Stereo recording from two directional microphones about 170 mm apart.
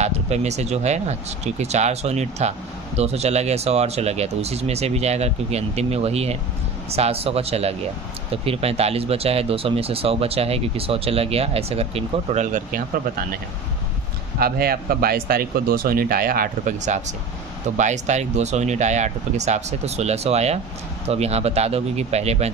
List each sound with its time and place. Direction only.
0.0 s speech: 40° right (ahead or behind)
14.4 s speech: 60° right (ahead or behind); by 22.5 s 40° right (ahead or behind)